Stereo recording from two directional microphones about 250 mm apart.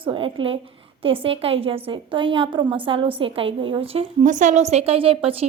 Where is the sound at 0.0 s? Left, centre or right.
Right.